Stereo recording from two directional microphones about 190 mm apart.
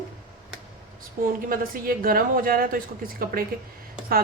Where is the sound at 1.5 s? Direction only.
50° right (ahead or behind).